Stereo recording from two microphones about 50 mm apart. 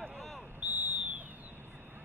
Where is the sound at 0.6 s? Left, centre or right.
Right.